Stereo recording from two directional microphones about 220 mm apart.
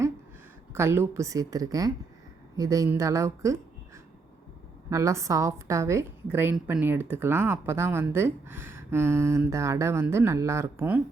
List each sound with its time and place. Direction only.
0.7 s a woman's voice: 10° right (ahead or behind)
4.9 s a woman's voice: 15° right (ahead or behind)